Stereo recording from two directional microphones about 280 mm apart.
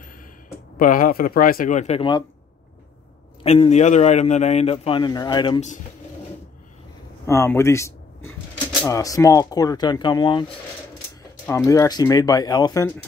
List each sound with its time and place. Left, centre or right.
0.7 s a man's voice: left
3.4 s a man's voice: left
7.2 s speech: centre
11.4 s speech: centre